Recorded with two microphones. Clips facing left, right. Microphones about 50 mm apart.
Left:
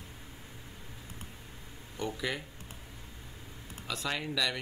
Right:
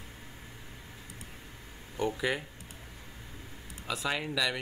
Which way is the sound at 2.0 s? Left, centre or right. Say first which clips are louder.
Right 4 dB; centre.